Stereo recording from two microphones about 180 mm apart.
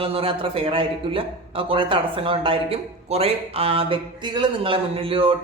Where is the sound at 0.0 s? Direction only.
30° right (ahead or behind).